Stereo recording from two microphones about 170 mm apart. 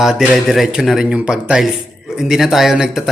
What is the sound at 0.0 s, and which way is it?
Speech, centre (ahead or behind).